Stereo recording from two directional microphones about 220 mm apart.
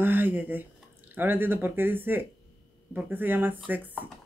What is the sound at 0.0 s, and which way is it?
Speech, 10° right (ahead or behind).